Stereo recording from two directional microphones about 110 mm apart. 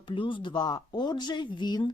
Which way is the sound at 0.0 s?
50° left (ahead or behind).